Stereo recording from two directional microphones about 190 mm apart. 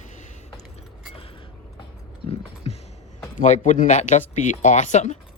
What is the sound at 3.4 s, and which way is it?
A man's voice, 45° left (ahead or behind).